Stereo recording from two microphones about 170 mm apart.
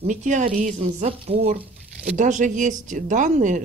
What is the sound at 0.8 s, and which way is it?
Speech, 35° right (ahead or behind).